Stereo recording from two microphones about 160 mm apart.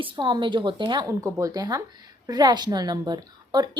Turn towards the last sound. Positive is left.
turn(degrees=-25)  # may be behind; listen again after turning